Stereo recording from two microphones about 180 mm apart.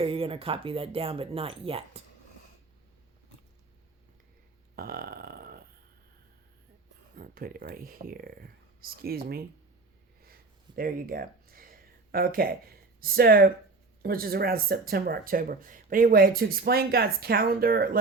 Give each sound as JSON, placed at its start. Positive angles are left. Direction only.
{"t": 0.0, "sound": "speech", "side_deg": -30}
{"t": 4.7, "sound": "burping", "side_deg": -55}
{"t": 7.2, "sound": "speech", "side_deg": -55}
{"t": 10.2, "sound": "a sound", "side_deg": -55}
{"t": 14.0, "sound": "speech", "side_deg": -55}